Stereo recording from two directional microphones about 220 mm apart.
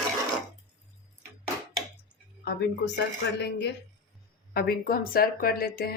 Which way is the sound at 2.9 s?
50° left (ahead or behind).